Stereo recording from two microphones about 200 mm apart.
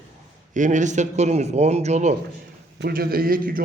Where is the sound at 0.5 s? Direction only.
40° right (ahead or behind).